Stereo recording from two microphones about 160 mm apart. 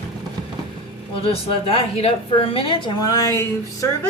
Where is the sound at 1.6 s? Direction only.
35° left (ahead or behind).